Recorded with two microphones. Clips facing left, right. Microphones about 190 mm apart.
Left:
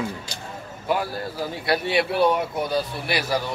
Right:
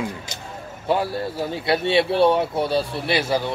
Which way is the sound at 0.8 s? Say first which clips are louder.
Right 3 dB; 25° right (ahead or behind).